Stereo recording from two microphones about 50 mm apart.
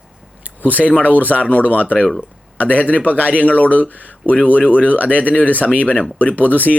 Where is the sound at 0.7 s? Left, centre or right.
Left.